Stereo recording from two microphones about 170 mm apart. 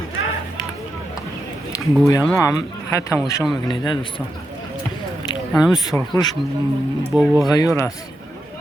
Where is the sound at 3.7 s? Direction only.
30° left (ahead or behind).